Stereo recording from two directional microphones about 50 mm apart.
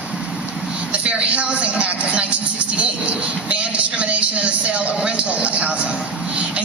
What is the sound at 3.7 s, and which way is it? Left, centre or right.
A man's voice, right.